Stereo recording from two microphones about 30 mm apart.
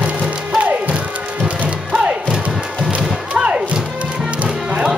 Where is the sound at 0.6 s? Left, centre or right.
Right.